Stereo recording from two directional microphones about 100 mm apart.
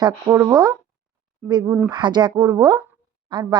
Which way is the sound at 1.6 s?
20° right (ahead or behind).